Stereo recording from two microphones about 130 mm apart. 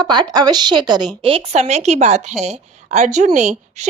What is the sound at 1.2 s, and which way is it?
A woman's voice, 55° right (ahead or behind).